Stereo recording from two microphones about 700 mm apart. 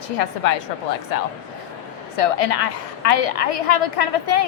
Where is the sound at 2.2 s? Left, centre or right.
Left.